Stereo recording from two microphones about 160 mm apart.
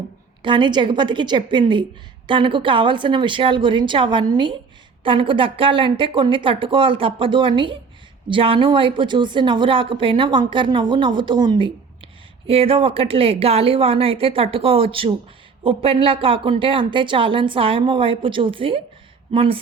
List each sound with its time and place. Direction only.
0.4 s a woman's voice: 30° right (ahead or behind)